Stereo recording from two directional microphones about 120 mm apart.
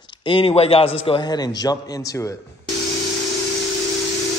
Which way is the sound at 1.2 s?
35° left (ahead or behind).